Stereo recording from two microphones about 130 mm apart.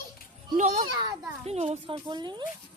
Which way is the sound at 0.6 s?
70° right (ahead or behind).